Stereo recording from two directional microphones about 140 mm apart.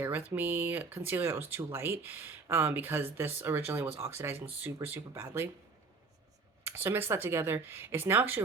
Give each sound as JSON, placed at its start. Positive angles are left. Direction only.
{"t": 0.0, "sound": "speech", "side_deg": -10}
{"t": 6.7, "sound": "speech", "side_deg": -15}